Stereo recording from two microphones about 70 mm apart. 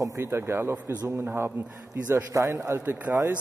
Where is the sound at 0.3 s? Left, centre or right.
Right.